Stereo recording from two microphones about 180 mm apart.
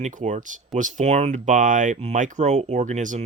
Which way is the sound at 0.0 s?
40° right (ahead or behind).